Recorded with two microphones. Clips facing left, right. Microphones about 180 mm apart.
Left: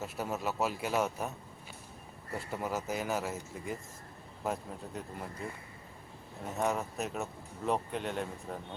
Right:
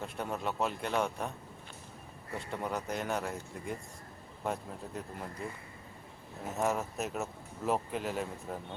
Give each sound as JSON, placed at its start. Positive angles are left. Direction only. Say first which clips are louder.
{"t": 0.0, "sound": "speech", "louder": "left 1 dB", "side_deg": 5}
{"t": 2.5, "sound": "speech", "louder": "left 1 dB", "side_deg": 5}
{"t": 6.4, "sound": "speech", "louder": "even", "side_deg": 0}